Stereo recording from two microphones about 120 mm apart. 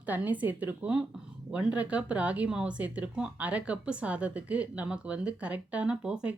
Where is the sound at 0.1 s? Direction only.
15° right (ahead or behind).